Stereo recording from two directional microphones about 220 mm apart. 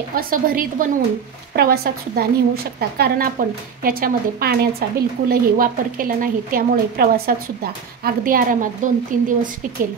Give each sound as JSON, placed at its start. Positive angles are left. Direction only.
{"t": 0.1, "sound": "a woman's voice", "side_deg": -40}